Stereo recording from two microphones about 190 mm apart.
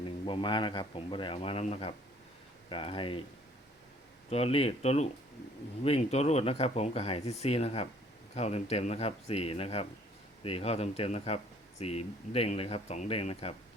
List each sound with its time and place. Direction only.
0.0 s speech: 25° left (ahead or behind)
4.3 s speech: 30° left (ahead or behind)